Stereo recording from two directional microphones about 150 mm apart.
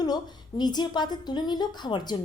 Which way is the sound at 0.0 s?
25° left (ahead or behind).